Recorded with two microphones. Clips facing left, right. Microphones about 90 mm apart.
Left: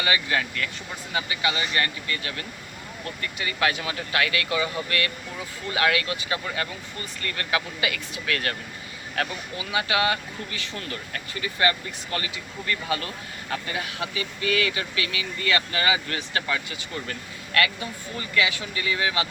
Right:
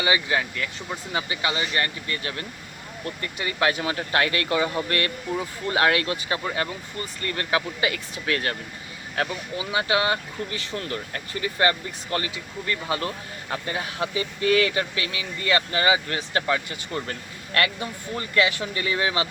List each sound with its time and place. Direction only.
0.0 s speech: 20° right (ahead or behind)
1.1 s speech: 30° right (ahead or behind)